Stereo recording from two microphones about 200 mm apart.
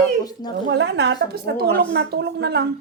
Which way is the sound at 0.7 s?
60° right (ahead or behind).